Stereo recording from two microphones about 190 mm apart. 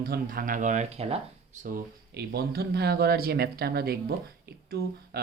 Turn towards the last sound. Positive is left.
turn(degrees=-55)  # may be behind; listen again after turning